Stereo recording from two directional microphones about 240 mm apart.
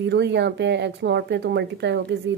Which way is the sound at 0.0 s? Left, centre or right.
Right.